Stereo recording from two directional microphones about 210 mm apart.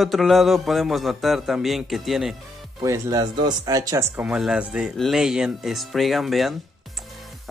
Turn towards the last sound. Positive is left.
turn(degrees=0)  # may be behind; listen again after turning